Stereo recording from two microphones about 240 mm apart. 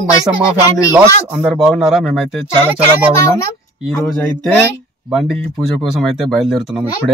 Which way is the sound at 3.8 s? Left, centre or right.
Centre.